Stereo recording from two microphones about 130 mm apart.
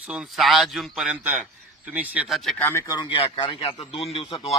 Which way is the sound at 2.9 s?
35° left (ahead or behind).